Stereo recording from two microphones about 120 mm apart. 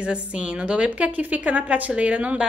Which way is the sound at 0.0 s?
10° right (ahead or behind).